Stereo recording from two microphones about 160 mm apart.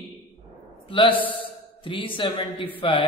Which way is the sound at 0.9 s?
35° left (ahead or behind).